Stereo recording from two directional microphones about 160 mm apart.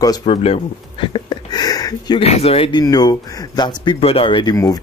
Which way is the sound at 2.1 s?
40° left (ahead or behind).